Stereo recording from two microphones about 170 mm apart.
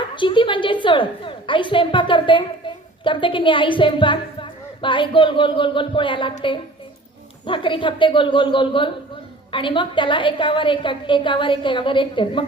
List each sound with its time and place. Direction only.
0.2 s a woman's voice: 30° left (ahead or behind)
7.4 s a woman's voice: 30° left (ahead or behind)